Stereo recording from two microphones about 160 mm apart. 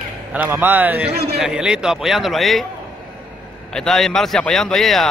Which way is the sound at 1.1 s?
75° right (ahead or behind).